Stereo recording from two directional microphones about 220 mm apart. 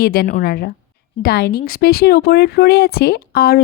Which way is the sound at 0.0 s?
40° left (ahead or behind).